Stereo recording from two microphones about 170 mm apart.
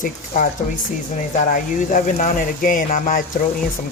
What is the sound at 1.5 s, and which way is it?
Speech, 55° left (ahead or behind).